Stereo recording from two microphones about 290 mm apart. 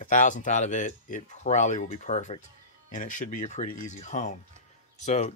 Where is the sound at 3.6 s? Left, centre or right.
Left.